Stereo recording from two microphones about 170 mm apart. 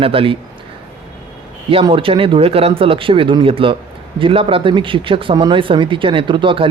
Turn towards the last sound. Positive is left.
turn(degrees=-30)  # may be behind; listen again after turning